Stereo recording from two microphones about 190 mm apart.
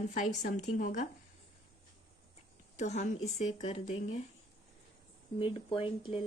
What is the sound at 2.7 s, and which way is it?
Speech, 40° left (ahead or behind).